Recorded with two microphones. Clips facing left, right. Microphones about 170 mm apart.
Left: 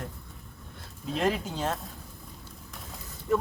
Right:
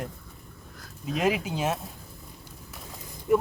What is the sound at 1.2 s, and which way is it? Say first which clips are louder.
Speech: right 2 dB; 10° right (ahead or behind).